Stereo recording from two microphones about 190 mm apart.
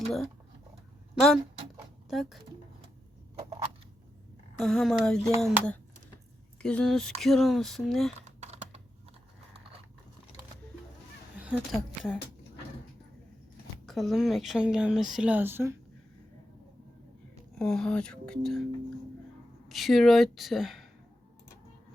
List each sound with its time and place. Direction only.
1.1 s speech: centre (ahead or behind)
3.3 s a sound: 30° right (ahead or behind)
4.6 s speech: centre (ahead or behind)
8.4 s typing: 35° right (ahead or behind)
11.3 s a sound: 5° right (ahead or behind)
13.8 s speech: centre (ahead or behind)
17.6 s speech: centre (ahead or behind)
19.6 s speech: centre (ahead or behind)